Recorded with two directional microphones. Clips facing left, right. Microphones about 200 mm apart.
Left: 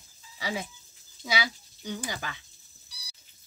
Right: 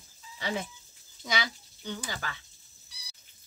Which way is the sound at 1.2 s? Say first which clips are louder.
Left 2 dB; 5° left (ahead or behind).